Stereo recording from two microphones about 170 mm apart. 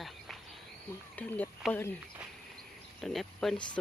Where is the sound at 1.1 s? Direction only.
10° left (ahead or behind).